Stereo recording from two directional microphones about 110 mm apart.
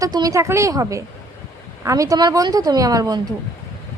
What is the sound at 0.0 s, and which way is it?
A woman's voice, 35° right (ahead or behind).